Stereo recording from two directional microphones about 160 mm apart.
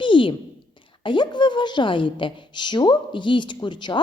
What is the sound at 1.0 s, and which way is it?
A woman's voice, 30° left (ahead or behind).